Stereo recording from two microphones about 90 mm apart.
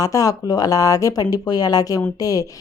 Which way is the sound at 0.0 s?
40° left (ahead or behind).